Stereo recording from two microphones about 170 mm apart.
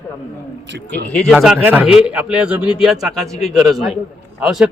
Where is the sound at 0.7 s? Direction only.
85° right.